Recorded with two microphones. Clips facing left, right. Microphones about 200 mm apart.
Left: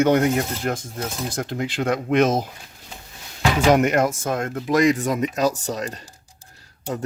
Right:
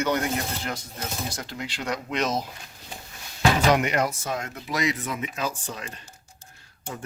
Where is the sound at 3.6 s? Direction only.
50° left (ahead or behind).